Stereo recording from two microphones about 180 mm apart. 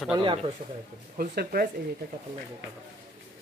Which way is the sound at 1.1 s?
55° right (ahead or behind).